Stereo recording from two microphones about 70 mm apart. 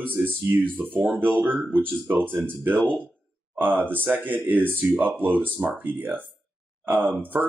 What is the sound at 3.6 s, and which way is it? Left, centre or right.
Speech, right.